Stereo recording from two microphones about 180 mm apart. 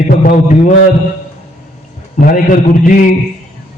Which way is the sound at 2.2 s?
50° left (ahead or behind).